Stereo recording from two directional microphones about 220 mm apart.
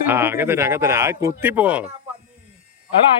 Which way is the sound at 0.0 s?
10° right (ahead or behind).